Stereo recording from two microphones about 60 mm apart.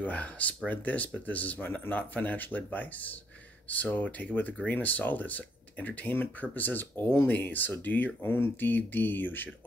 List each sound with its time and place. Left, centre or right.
0.0 s speech: left